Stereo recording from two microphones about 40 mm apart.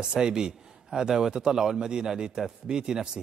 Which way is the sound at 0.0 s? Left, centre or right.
Centre.